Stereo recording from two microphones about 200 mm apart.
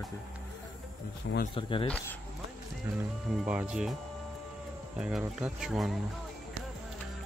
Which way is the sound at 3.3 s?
5° right (ahead or behind).